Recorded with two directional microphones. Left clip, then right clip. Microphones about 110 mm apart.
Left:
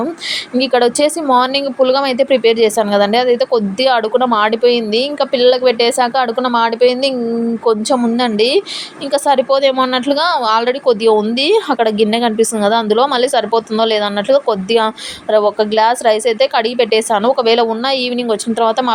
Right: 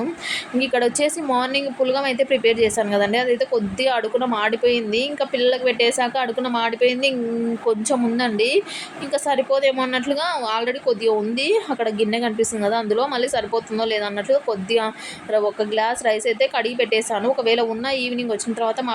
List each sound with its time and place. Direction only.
0.6 s speech: 50° left (ahead or behind)